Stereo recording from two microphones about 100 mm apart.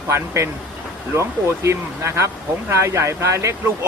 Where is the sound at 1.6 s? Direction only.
30° right (ahead or behind).